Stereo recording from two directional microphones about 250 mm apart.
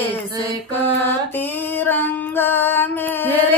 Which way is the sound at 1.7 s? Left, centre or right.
Centre.